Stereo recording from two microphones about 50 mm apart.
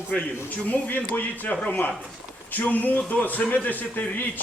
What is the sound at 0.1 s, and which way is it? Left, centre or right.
Speech, left.